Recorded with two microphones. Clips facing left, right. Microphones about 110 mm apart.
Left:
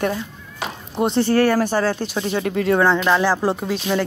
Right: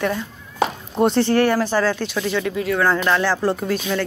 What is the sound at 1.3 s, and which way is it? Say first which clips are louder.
Speech: left 1 dB; 40° left (ahead or behind).